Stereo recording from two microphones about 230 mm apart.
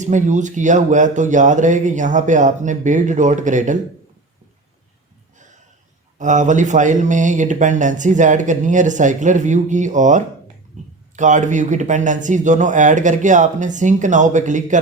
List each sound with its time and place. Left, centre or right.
0.0 s speech: right
6.1 s speech: right